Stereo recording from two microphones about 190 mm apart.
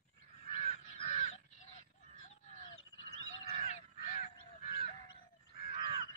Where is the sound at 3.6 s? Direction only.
45° left (ahead or behind).